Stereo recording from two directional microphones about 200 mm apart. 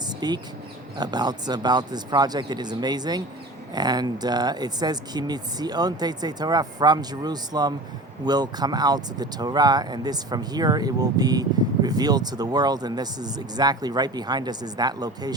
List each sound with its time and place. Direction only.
0.2 s speech: 20° right (ahead or behind)